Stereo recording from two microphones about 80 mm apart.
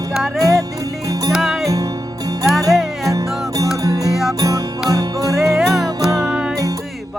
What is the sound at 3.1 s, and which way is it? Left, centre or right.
Music, right.